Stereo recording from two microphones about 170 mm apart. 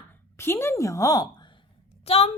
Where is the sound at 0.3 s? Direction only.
15° left (ahead or behind).